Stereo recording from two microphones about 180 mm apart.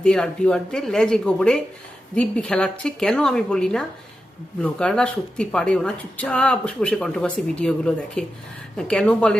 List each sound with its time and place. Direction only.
0.0 s speech: 5° left (ahead or behind)